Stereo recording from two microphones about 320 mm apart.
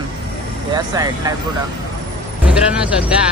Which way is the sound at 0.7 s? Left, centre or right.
Centre.